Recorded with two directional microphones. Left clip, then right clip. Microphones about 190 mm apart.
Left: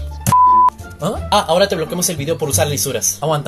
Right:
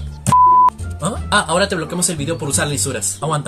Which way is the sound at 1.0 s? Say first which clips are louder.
Left 2 dB; 15° right (ahead or behind).